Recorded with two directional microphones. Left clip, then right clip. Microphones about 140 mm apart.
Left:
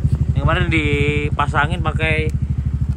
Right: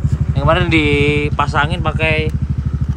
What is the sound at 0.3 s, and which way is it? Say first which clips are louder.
Speech: right 6 dB; 15° right (ahead or behind).